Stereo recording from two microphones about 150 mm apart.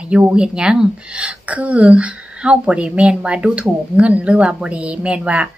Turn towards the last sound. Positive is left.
turn(degrees=-10)  # may be behind; listen again after turning